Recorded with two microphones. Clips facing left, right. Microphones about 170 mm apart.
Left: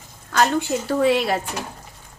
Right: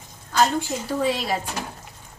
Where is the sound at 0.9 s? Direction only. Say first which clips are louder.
Left 5 dB; 65° left (ahead or behind).